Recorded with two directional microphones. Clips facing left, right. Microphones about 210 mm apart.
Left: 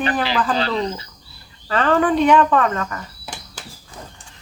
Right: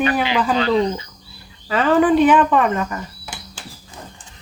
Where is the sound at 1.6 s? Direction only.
5° right (ahead or behind).